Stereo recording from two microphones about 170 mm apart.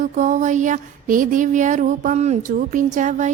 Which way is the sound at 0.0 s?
45° right (ahead or behind).